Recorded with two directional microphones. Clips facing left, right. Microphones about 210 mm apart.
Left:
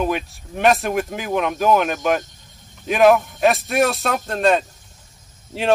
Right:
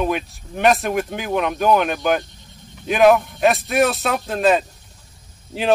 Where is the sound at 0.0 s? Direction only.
Centre (ahead or behind).